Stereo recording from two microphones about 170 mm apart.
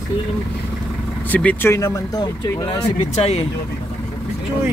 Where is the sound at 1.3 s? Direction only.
10° left (ahead or behind).